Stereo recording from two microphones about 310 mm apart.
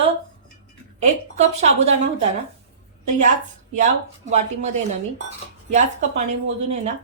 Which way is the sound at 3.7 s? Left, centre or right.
Right.